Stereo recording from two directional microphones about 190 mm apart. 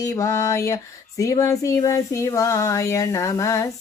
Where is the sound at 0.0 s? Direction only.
15° left (ahead or behind).